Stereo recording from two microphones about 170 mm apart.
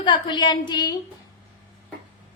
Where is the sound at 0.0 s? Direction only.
25° left (ahead or behind).